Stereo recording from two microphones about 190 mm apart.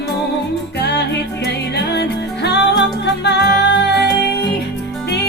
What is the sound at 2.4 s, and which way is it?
Music, 65° left (ahead or behind).